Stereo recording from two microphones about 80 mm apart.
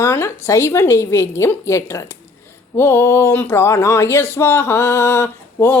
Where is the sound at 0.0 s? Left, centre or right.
Left.